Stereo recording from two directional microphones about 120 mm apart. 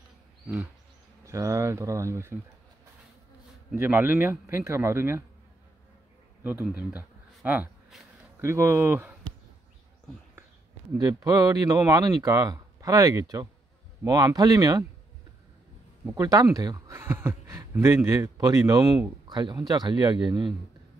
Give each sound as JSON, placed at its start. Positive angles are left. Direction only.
{"t": 1.2, "sound": "speech", "side_deg": -25}
{"t": 3.7, "sound": "speech", "side_deg": -15}
{"t": 6.9, "sound": "a sound", "side_deg": -15}
{"t": 8.4, "sound": "speech", "side_deg": -25}
{"t": 11.0, "sound": "speech", "side_deg": -30}
{"t": 16.2, "sound": "speech", "side_deg": -30}